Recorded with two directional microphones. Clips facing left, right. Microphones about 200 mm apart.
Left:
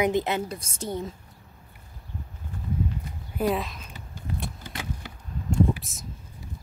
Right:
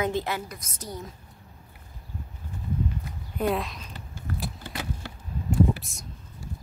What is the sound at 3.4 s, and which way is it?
Speech, centre (ahead or behind).